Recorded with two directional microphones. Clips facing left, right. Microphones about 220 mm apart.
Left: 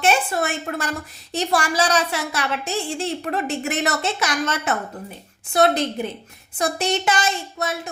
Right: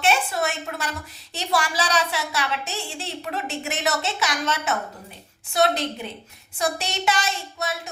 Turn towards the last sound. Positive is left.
turn(degrees=50)  # may be behind; listen again after turning